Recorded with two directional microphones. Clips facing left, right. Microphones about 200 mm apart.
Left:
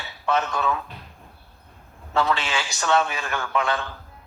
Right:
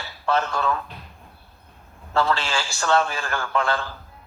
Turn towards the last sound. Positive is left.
turn(degrees=15)  # may be behind; listen again after turning